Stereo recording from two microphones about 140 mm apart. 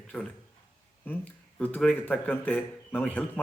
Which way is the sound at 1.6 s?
10° left (ahead or behind).